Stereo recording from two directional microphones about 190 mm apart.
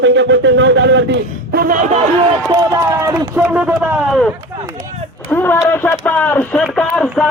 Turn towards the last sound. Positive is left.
turn(degrees=0)  # may be behind; listen again after turning